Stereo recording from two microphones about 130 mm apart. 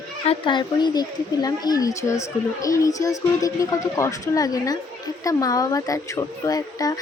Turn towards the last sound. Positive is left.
turn(degrees=30)  # may be behind; listen again after turning